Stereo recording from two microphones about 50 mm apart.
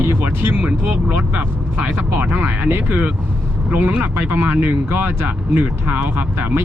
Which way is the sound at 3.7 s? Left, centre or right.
Right.